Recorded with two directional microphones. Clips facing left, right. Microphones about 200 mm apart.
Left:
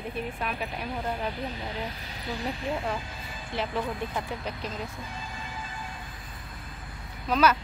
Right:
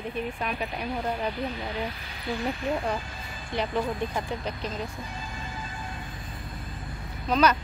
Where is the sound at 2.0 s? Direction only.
40° left (ahead or behind).